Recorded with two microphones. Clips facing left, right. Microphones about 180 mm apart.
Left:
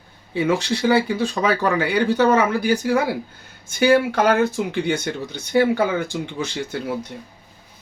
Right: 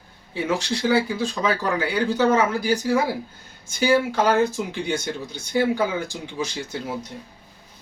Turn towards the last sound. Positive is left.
turn(degrees=60)  # may be behind; listen again after turning